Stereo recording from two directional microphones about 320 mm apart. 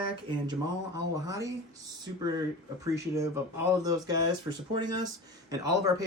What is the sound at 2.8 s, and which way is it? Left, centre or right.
Speech, centre.